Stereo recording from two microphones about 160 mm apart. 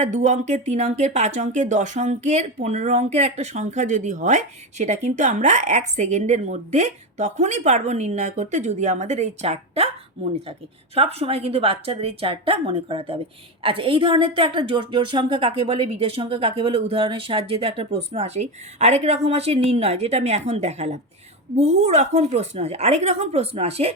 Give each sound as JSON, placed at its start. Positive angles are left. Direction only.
{"t": 0.0, "sound": "speech", "side_deg": -50}
{"t": 10.9, "sound": "a woman's voice", "side_deg": -40}